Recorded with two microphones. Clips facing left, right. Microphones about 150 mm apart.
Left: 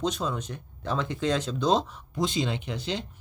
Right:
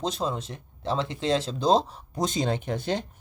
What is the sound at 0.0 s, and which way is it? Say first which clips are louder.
Speech: even; 30° right (ahead or behind).